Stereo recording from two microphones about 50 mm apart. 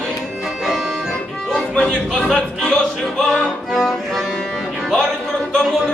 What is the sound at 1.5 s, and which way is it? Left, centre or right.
Chatter, centre.